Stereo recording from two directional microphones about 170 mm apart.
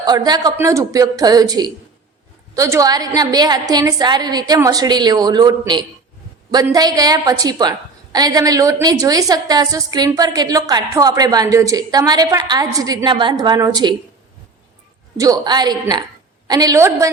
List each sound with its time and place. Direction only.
0.0 s a woman's voice: 25° right (ahead or behind)
15.2 s a woman's voice: 25° right (ahead or behind)